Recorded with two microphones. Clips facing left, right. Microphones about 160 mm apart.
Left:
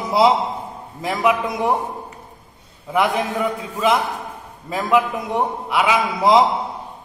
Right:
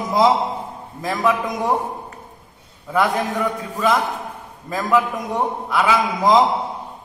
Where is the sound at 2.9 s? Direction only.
20° left (ahead or behind).